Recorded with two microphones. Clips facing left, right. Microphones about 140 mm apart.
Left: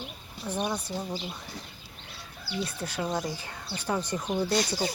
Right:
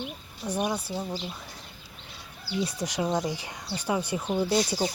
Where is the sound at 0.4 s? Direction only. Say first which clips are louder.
Right 2 dB; 10° right (ahead or behind).